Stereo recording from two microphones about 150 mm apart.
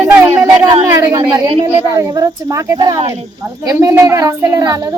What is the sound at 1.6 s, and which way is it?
Speech, 20° right (ahead or behind).